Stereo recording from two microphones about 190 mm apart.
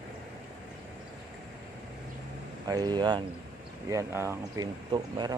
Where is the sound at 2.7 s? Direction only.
20° right (ahead or behind).